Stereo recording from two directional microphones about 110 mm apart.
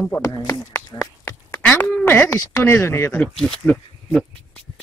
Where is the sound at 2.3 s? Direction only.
30° left (ahead or behind).